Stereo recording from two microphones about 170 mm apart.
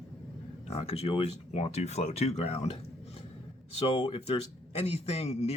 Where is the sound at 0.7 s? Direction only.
35° left (ahead or behind).